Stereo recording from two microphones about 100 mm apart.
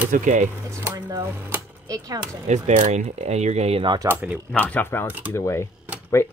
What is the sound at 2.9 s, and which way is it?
Speech, 90° right.